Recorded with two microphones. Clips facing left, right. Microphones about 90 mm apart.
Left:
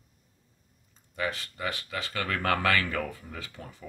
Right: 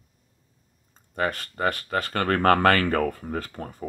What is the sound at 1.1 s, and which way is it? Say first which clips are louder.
Speech: right 5 dB; 50° right (ahead or behind).